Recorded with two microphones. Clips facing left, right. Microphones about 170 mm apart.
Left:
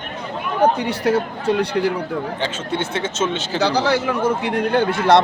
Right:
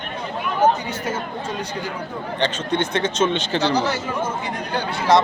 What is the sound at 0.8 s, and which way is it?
Speech, 70° left (ahead or behind).